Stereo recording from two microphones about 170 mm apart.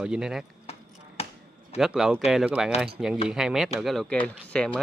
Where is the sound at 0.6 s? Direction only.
40° left (ahead or behind).